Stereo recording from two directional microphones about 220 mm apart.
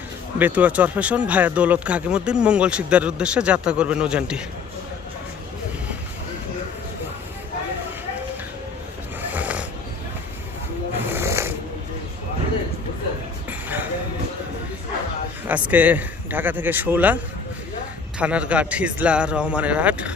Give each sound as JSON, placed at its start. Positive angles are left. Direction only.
{"t": 0.3, "sound": "speech", "side_deg": -5}
{"t": 9.3, "sound": "filing", "side_deg": -5}
{"t": 11.1, "sound": "snoring", "side_deg": -10}
{"t": 13.5, "sound": "a sound", "side_deg": -10}
{"t": 15.4, "sound": "a man's voice", "side_deg": -5}
{"t": 18.2, "sound": "speech", "side_deg": -5}